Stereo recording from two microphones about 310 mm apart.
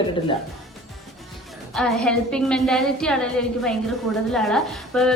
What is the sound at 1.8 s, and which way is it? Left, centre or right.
A woman's voice, centre.